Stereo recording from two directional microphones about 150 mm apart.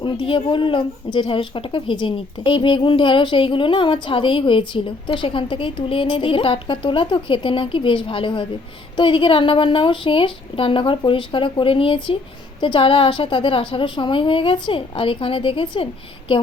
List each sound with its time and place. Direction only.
0.0 s speech: 35° left (ahead or behind)